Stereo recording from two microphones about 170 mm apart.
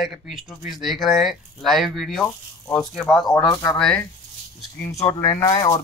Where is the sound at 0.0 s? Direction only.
Centre (ahead or behind).